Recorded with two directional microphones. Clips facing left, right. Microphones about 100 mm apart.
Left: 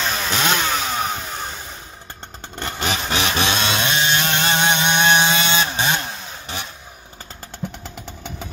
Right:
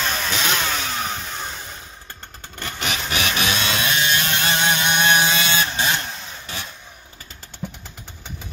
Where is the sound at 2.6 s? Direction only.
30° left (ahead or behind).